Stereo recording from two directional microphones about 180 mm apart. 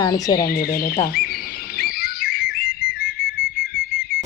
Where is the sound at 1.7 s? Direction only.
55° left (ahead or behind).